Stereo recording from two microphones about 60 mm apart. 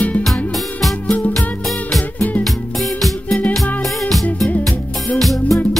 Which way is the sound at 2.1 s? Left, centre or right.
Left.